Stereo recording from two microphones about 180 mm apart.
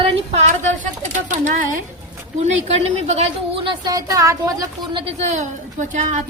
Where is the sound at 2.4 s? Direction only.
40° right (ahead or behind).